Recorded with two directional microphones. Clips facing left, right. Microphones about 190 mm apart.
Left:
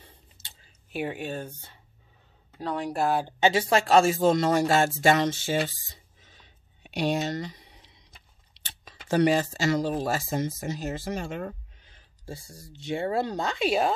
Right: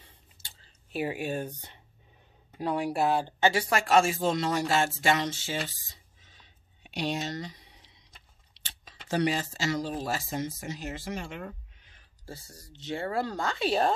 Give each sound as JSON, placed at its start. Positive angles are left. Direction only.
{"t": 0.9, "sound": "speech", "side_deg": -5}
{"t": 3.3, "sound": "speech", "side_deg": 20}
{"t": 6.9, "sound": "speech", "side_deg": 55}
{"t": 8.6, "sound": "speech", "side_deg": 50}
{"t": 12.3, "sound": "speech", "side_deg": 10}